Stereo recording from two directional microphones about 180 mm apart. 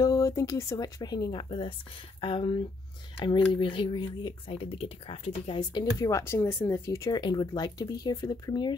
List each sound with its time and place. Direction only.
0.0 s speech: 20° left (ahead or behind)